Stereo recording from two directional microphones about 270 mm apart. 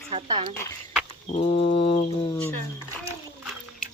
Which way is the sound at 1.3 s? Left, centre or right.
Left.